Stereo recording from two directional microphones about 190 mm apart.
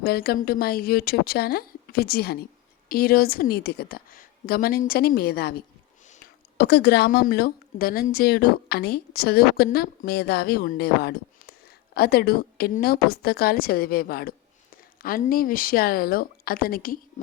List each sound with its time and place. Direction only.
0.0 s a woman's voice: 55° left (ahead or behind)